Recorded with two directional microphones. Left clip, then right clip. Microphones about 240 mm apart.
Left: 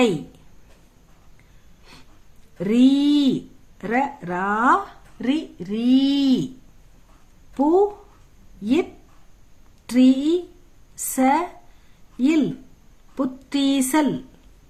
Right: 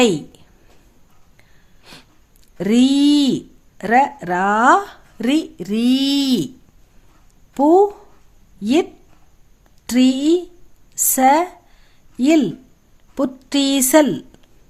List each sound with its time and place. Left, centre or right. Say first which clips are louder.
1.8 s a sound: right 6 dB; right
2.6 s speech: right 3 dB; right
7.5 s speech: right 5 dB; right